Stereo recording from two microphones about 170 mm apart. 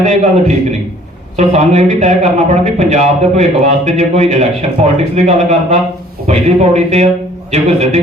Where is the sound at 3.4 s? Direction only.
40° right (ahead or behind).